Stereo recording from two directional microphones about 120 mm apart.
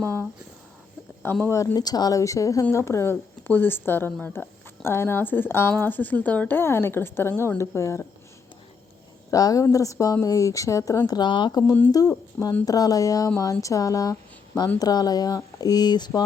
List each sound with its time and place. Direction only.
0.0 s a sound: 20° left (ahead or behind)
1.2 s speech: 20° left (ahead or behind)
9.3 s speech: 30° left (ahead or behind)